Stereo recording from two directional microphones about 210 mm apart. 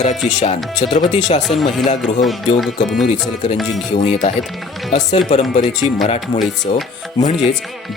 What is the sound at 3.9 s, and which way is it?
Speech, 30° left (ahead or behind).